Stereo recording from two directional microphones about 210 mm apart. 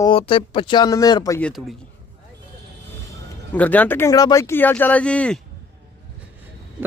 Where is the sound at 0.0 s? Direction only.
25° left (ahead or behind).